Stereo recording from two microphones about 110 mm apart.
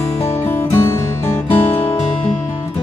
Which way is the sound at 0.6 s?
20° left (ahead or behind).